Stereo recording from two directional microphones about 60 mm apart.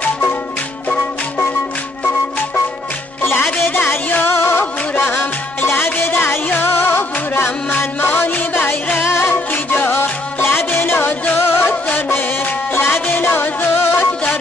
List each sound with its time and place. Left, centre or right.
3.2 s music: left
9.5 s music: left
11.9 s music: left
12.7 s music: left